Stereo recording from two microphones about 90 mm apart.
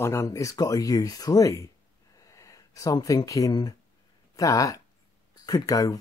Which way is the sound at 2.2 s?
35° left (ahead or behind).